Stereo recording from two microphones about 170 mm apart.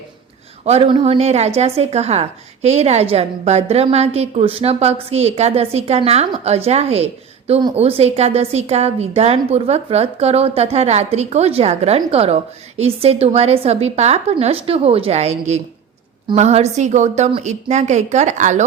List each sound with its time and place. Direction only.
0.6 s a woman's voice: 35° right (ahead or behind)